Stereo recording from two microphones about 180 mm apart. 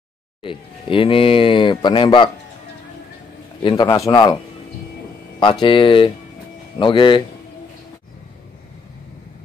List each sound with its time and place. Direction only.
0.4 s speech: 30° left (ahead or behind)
3.6 s speech: 20° left (ahead or behind)
5.4 s speech: 25° left (ahead or behind)